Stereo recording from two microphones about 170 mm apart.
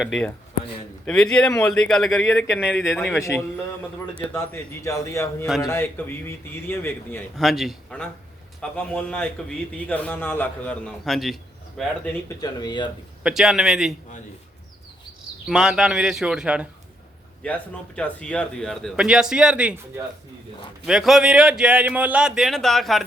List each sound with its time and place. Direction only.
0.0 s speech: centre (ahead or behind)
3.2 s a man's voice: 15° left (ahead or behind)
7.3 s a man's voice: centre (ahead or behind)
12.4 s speech: 25° left (ahead or behind)
13.2 s speech: centre (ahead or behind)
15.4 s speech: 5° right (ahead or behind)
17.4 s speech: 10° left (ahead or behind)
20.8 s speech: centre (ahead or behind)